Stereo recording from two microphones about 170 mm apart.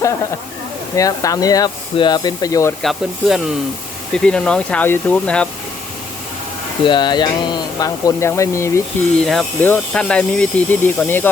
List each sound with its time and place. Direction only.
0.9 s speech: 20° left (ahead or behind)
2.8 s speech: 5° right (ahead or behind)
6.8 s speech: 25° left (ahead or behind)
9.2 s speech: centre (ahead or behind)